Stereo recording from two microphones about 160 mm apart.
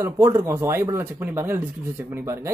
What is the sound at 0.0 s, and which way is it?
Speech, 20° right (ahead or behind).